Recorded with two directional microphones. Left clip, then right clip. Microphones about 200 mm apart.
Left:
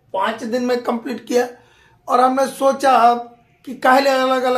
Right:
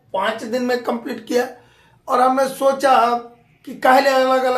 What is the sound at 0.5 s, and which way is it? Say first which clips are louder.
A woman's voice: left 1 dB; 30° left (ahead or behind).